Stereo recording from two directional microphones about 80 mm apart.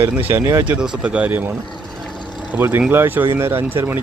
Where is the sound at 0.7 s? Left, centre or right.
Centre.